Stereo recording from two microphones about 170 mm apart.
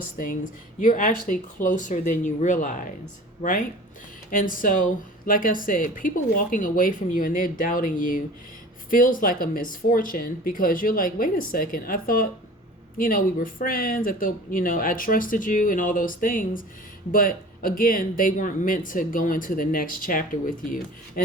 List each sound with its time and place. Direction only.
0.8 s speech: 50° left (ahead or behind)